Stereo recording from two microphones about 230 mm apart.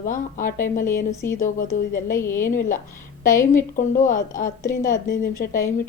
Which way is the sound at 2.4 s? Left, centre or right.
Left.